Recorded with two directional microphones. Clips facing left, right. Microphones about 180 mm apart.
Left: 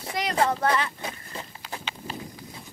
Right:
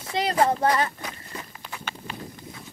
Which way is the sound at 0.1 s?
30° right (ahead or behind).